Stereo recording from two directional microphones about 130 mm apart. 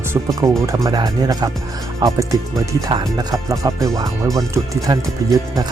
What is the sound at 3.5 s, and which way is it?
Speech, 25° right (ahead or behind).